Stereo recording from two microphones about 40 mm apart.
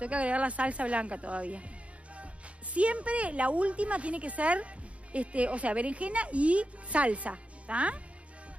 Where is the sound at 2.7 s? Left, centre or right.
Right.